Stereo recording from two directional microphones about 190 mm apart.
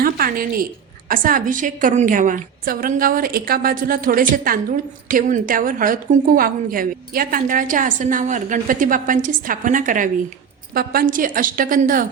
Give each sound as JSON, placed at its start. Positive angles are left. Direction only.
{"t": 0.0, "sound": "a woman's voice", "side_deg": -50}